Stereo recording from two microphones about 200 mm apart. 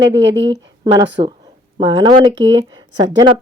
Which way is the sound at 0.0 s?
65° right (ahead or behind).